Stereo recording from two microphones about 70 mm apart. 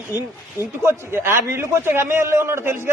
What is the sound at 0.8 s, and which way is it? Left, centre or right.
A man's voice, right.